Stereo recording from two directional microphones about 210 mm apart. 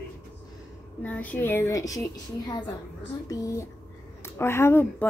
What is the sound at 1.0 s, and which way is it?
A woman's voice, 10° left (ahead or behind).